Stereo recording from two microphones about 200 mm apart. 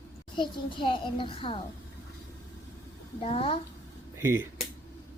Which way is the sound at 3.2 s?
30° left (ahead or behind).